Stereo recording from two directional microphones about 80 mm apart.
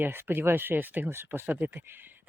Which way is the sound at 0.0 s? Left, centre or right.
Right.